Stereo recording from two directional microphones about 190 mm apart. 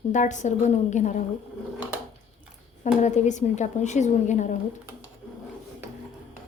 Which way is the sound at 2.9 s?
40° left (ahead or behind).